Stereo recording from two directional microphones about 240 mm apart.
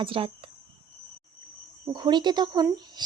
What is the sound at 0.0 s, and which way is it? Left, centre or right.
Speech, right.